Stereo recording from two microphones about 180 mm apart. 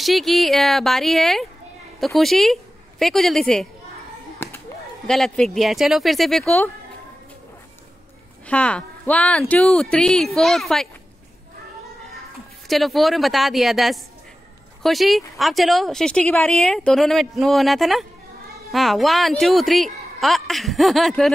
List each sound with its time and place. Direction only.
0.0 s a woman's voice: centre (ahead or behind)
4.4 s a sound: 10° left (ahead or behind)
5.0 s a woman's voice: 5° left (ahead or behind)
8.5 s a woman's voice: 5° left (ahead or behind)
12.6 s a woman's voice: centre (ahead or behind)